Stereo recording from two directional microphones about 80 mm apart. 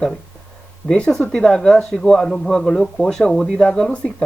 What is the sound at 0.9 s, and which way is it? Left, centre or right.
Speech, centre.